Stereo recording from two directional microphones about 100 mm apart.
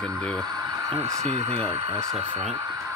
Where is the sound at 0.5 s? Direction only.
55° right (ahead or behind).